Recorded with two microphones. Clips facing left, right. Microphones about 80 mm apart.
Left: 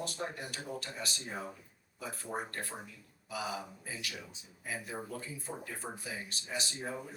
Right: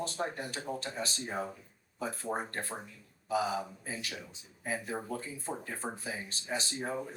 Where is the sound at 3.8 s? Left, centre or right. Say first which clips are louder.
Right 2 dB; right.